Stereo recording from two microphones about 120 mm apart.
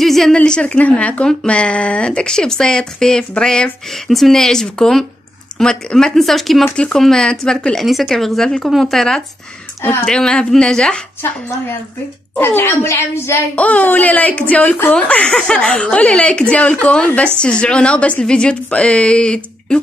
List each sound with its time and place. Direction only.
0.0 s a sound: centre (ahead or behind)
0.4 s speech: 10° left (ahead or behind)
9.8 s speech: 20° left (ahead or behind)
10.0 s speech: 5° left (ahead or behind)
11.2 s a child's voice: 20° left (ahead or behind)